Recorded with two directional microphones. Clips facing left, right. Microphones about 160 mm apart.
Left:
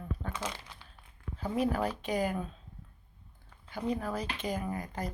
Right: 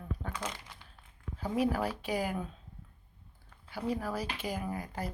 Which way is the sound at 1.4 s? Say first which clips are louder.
Even; 10° right (ahead or behind).